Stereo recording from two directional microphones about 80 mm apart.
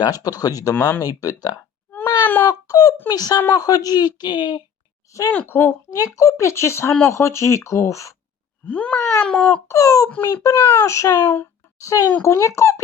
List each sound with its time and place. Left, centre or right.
0.0 s speech: left
0.8 s a child's voice: left
1.0 s speech: left
1.9 s a sound: left
2.5 s a sound: left
3.1 s speech: left
5.3 s speech: left
6.1 s a child's voice: left
8.6 s speech: centre
9.2 s baby cry: centre
9.6 s a child's voice: left
10.2 s a child's voice: left
11.8 s a child's voice: left